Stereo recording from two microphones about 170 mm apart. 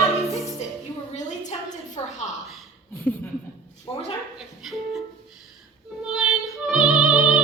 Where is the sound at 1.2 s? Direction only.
45° left (ahead or behind).